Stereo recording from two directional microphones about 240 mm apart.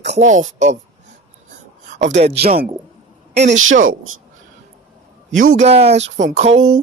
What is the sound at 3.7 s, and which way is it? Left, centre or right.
Music, right.